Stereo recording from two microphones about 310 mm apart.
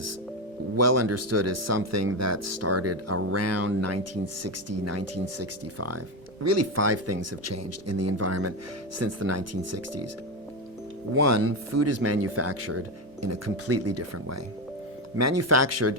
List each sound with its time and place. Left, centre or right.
0.8 s speech: right
11.3 s speech: right